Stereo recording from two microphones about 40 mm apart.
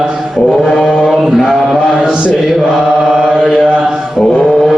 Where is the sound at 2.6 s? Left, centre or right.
Centre.